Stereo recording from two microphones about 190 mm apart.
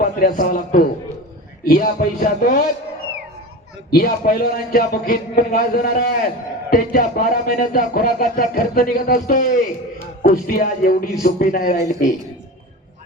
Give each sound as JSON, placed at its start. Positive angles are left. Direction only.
{"t": 0.2, "sound": "speech", "side_deg": 45}
{"t": 3.9, "sound": "speech", "side_deg": 55}